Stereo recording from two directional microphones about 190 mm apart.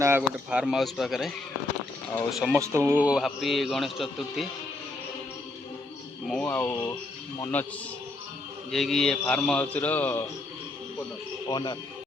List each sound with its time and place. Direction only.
0.0 s a man's voice: 10° right (ahead or behind)
2.4 s a man's voice: 15° right (ahead or behind)
6.2 s speech: 5° left (ahead or behind)
8.7 s a man's voice: centre (ahead or behind)
11.4 s speech: 20° left (ahead or behind)